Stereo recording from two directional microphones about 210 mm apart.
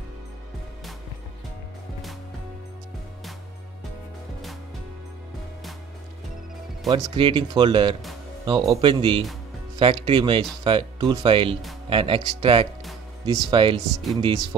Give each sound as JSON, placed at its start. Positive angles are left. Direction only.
{"t": 6.9, "sound": "speech", "side_deg": -25}